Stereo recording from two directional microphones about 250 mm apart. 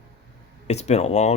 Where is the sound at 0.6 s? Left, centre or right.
Left.